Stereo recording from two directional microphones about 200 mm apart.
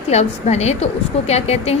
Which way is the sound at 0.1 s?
35° left (ahead or behind).